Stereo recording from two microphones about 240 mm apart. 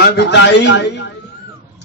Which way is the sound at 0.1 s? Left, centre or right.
Left.